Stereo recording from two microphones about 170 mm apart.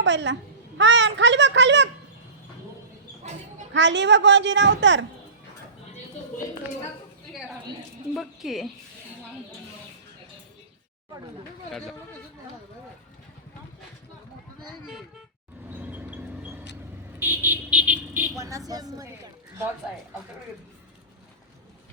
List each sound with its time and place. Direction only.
0.0 s a woman's voice: 90° right
3.8 s a woman's voice: 90° right
8.1 s speech: centre (ahead or behind)
15.7 s vehicle: 10° right (ahead or behind)